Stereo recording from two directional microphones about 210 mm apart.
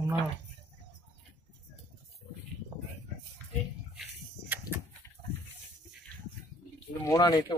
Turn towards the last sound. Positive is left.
turn(degrees=20)  # may be behind; listen again after turning